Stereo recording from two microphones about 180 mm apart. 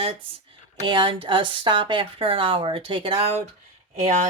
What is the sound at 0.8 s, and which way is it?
Speech, 30° right (ahead or behind).